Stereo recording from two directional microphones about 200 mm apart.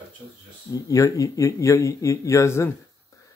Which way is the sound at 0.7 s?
15° left (ahead or behind).